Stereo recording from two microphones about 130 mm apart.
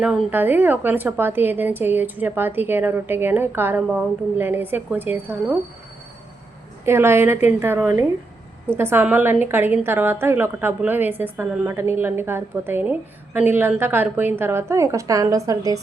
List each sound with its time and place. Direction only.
0.0 s a woman's voice: 10° right (ahead or behind)
6.8 s a woman's voice: 20° right (ahead or behind)